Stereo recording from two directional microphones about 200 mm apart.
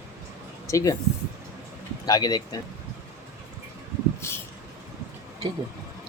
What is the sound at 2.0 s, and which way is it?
Speech, 20° left (ahead or behind).